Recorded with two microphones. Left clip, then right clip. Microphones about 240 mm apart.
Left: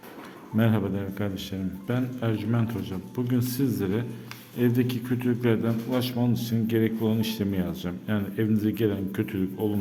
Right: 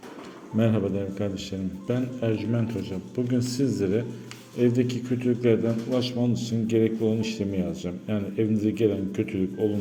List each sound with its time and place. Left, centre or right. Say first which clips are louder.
0.5 s a man's voice: right 2 dB; centre